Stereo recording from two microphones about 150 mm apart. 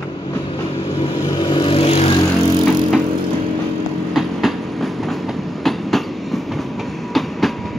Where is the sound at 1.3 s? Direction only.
30° left (ahead or behind).